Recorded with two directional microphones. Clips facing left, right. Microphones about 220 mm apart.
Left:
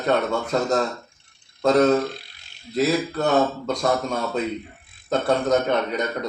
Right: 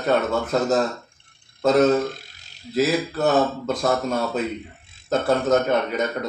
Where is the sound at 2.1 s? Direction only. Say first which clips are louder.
Even; 45° right (ahead or behind).